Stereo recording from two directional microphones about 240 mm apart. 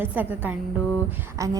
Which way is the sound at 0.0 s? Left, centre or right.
Centre.